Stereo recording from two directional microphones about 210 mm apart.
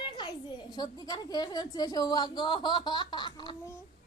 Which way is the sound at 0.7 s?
20° left (ahead or behind).